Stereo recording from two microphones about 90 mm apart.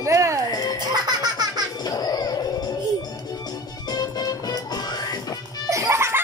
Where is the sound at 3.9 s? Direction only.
50° left (ahead or behind).